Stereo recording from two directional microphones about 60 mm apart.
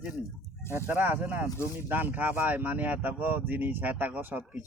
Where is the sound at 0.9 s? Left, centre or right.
Right.